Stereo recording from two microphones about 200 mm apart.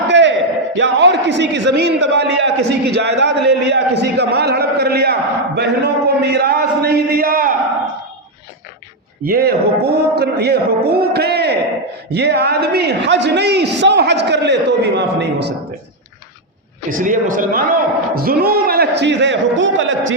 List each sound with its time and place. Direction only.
0.1 s a sound: 60° right (ahead or behind)
0.8 s a man's voice: 60° right (ahead or behind); by 7.5 s 45° right (ahead or behind)
9.2 s a man's voice: 50° right (ahead or behind)
17.0 s a man's voice: 40° right (ahead or behind); by 20.1 s 70° right (ahead or behind)